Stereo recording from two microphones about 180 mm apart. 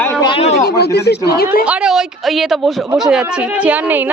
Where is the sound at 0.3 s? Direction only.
30° left (ahead or behind).